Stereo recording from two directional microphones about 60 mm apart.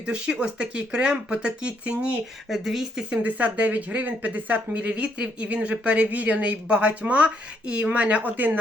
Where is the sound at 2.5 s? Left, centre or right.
Centre.